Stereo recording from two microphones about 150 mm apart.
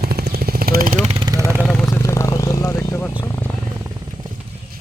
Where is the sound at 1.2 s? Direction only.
25° right (ahead or behind).